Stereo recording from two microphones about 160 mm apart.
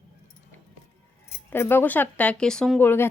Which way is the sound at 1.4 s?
15° left (ahead or behind).